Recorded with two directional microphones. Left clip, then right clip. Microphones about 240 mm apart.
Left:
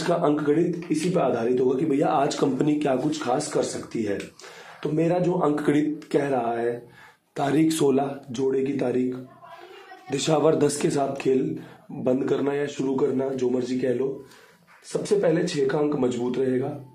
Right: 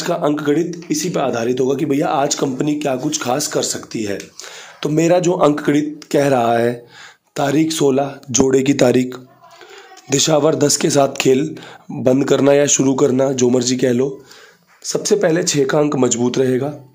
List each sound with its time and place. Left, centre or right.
0.0 s speech: right
5.6 s speech: right
7.3 s speech: right
8.5 s speech: right
10.0 s speech: right